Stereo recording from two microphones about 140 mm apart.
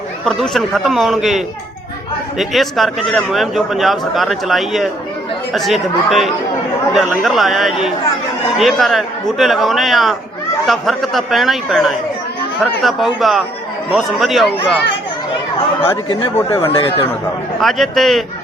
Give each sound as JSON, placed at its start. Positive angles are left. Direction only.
{"t": 0.3, "sound": "speech", "side_deg": 0}
{"t": 2.4, "sound": "speech", "side_deg": 0}
{"t": 16.6, "sound": "speech", "side_deg": 40}
{"t": 17.6, "sound": "speech", "side_deg": 0}